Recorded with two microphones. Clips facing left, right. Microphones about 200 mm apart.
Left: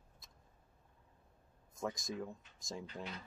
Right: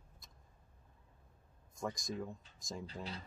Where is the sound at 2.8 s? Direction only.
35° right (ahead or behind).